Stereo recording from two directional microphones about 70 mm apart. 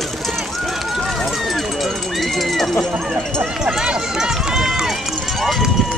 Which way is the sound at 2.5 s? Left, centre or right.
Centre.